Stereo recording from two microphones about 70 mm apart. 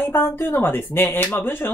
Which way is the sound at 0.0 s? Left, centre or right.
Left.